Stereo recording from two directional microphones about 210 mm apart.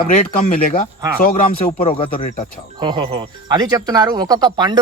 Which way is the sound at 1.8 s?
25° left (ahead or behind).